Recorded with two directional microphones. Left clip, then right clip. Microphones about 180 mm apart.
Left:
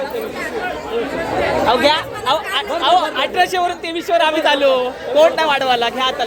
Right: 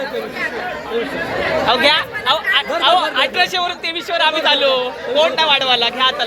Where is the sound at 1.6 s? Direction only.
20° left (ahead or behind).